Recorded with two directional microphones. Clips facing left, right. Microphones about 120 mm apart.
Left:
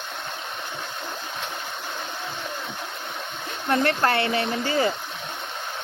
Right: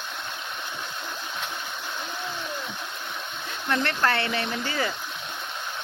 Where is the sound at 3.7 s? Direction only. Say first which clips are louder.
Left 3 dB; 25° left (ahead or behind).